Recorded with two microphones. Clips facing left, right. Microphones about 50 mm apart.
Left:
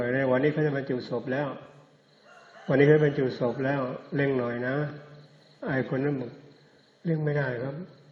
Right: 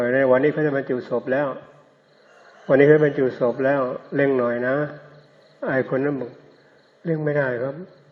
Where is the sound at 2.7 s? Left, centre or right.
Right.